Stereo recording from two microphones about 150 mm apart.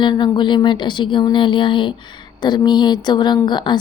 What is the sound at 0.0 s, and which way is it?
A woman's voice, 30° left (ahead or behind).